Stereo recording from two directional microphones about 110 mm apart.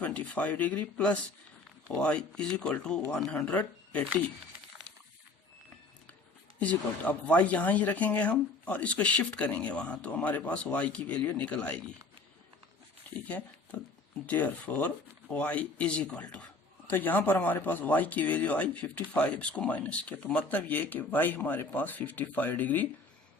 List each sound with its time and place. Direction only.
0.0 s speech: 10° left (ahead or behind)
3.5 s speech: 15° left (ahead or behind)
6.6 s speech: 15° left (ahead or behind)
13.2 s speech: 15° left (ahead or behind)